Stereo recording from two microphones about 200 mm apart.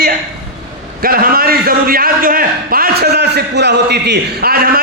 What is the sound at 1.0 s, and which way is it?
A man's voice, 45° right (ahead or behind).